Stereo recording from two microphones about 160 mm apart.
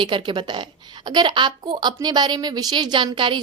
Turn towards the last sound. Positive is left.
turn(degrees=-30)  # may be behind; listen again after turning